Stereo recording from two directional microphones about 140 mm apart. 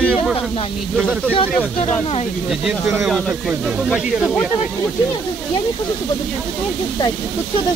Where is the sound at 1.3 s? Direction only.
45° left (ahead or behind).